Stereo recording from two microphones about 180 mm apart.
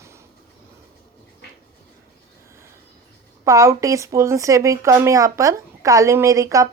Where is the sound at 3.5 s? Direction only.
15° right (ahead or behind).